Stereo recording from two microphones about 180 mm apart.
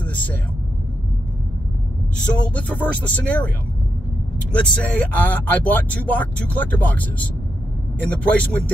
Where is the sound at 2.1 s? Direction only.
10° left (ahead or behind).